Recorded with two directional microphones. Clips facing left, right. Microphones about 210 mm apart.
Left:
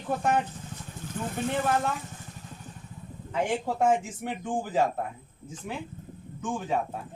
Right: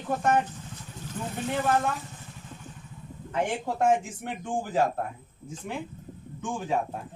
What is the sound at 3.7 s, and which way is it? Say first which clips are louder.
Speech: left 1 dB; 5° left (ahead or behind).